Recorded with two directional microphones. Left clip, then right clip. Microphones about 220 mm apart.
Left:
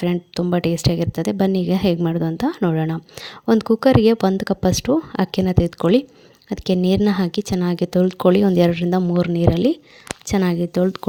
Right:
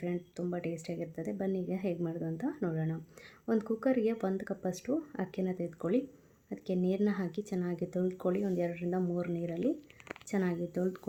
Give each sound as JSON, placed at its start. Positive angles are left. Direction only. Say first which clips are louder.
{"t": 0.0, "sound": "speech", "louder": "left 15 dB", "side_deg": 40}